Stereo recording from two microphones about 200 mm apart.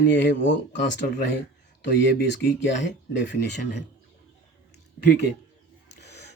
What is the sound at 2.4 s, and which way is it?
Speech, 60° left (ahead or behind).